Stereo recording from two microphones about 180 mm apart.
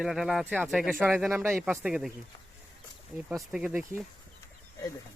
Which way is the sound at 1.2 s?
10° right (ahead or behind).